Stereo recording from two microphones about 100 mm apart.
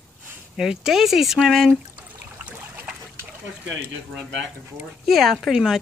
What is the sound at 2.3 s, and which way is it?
Boat, 20° right (ahead or behind).